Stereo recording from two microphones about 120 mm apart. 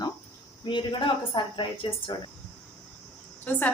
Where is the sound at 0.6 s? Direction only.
40° left (ahead or behind).